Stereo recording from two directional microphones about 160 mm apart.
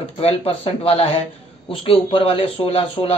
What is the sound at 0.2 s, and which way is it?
Speech, 35° left (ahead or behind).